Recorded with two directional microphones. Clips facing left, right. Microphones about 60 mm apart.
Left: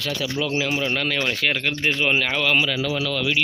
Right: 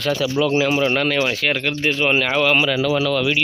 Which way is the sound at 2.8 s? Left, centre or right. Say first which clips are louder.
Right 6 dB; right.